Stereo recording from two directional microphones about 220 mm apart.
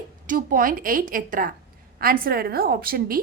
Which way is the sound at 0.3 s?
40° right (ahead or behind).